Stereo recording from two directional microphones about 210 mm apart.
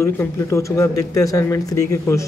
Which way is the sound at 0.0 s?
15° left (ahead or behind).